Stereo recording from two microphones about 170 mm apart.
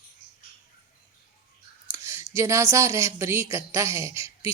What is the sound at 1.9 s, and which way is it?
Speech, 15° right (ahead or behind).